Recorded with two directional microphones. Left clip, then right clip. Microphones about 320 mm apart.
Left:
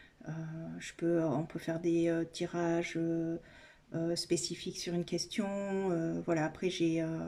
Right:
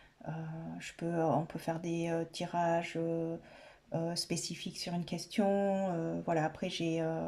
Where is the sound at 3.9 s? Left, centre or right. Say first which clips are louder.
Left 3 dB; centre.